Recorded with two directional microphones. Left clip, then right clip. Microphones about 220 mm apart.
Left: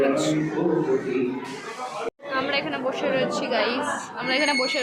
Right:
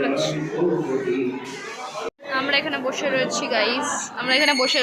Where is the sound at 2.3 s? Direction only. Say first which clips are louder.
Right 4 dB; 5° right (ahead or behind).